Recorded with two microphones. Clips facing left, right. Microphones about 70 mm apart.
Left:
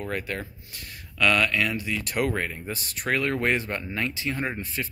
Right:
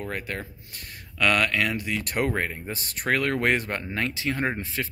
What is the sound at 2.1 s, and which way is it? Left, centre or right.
Speech, right.